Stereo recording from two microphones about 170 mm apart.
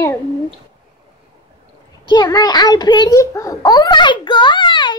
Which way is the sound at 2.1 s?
25° left (ahead or behind).